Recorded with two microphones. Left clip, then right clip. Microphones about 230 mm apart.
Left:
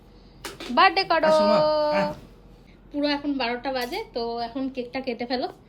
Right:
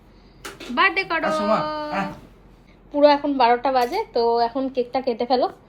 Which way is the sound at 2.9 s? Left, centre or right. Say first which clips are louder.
Right 10 dB; right.